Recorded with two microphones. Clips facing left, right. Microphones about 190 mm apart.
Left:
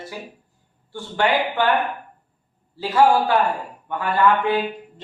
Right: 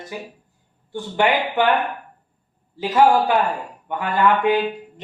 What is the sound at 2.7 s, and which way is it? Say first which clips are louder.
A man's voice: right 1 dB; 20° right (ahead or behind).